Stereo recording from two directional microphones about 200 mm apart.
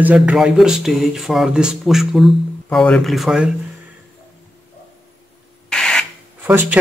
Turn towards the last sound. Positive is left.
turn(degrees=-10)  # may be behind; listen again after turning